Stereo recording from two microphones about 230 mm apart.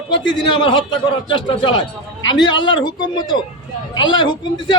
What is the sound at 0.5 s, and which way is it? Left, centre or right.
A man's voice, left.